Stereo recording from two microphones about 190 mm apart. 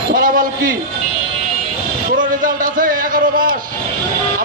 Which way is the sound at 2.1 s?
45° right (ahead or behind).